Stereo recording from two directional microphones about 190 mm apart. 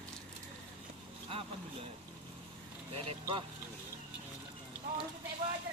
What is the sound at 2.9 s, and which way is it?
Vehicle, 30° right (ahead or behind).